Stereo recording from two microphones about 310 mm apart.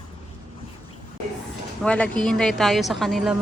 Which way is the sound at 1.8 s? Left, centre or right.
Centre.